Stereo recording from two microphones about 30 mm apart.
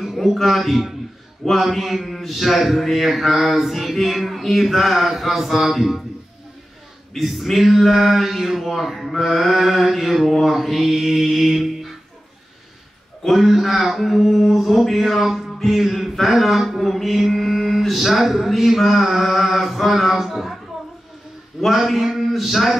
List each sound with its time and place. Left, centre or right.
0.0 s a sound: centre
0.4 s mantra: centre
7.2 s mantra: centre
11.5 s music: centre
13.3 s mantra: centre
20.2 s speech: centre
21.7 s a man's voice: centre